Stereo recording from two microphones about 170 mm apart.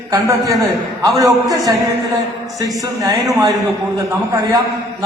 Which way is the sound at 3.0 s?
20° right (ahead or behind).